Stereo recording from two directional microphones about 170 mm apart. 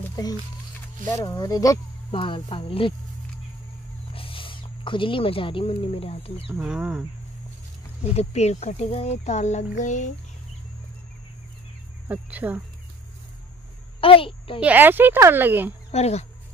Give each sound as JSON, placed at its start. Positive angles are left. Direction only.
{"t": 0.1, "sound": "a sound", "side_deg": 20}
{"t": 1.1, "sound": "speech", "side_deg": 25}
{"t": 2.1, "sound": "speech", "side_deg": 30}
{"t": 4.1, "sound": "speech", "side_deg": 30}
{"t": 6.5, "sound": "speech", "side_deg": -5}
{"t": 8.0, "sound": "speech", "side_deg": 40}
{"t": 12.1, "sound": "speech", "side_deg": -10}
{"t": 14.0, "sound": "a child's voice", "side_deg": 30}
{"t": 14.6, "sound": "speech", "side_deg": -10}
{"t": 15.9, "sound": "speech", "side_deg": 40}